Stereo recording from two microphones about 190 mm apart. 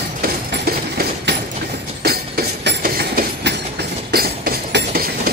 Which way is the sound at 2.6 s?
55° right (ahead or behind).